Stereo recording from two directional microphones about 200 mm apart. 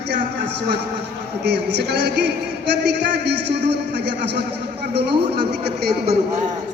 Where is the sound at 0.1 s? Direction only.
60° right (ahead or behind).